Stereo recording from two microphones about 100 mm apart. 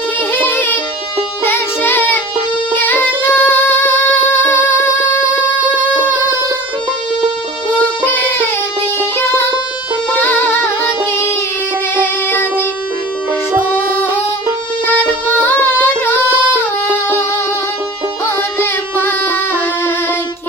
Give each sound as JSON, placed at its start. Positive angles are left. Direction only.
{"t": 0.3, "sound": "music", "side_deg": 20}
{"t": 1.5, "sound": "child singing", "side_deg": 20}
{"t": 2.7, "sound": "music", "side_deg": 20}
{"t": 8.0, "sound": "music", "side_deg": 20}
{"t": 11.9, "sound": "music", "side_deg": 20}
{"t": 14.8, "sound": "music", "side_deg": 20}
{"t": 18.6, "sound": "music", "side_deg": 20}